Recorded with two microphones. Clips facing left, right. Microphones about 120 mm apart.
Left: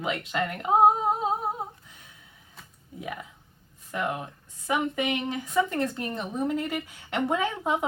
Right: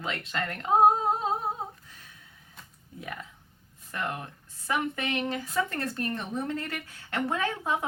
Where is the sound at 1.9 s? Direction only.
20° left (ahead or behind).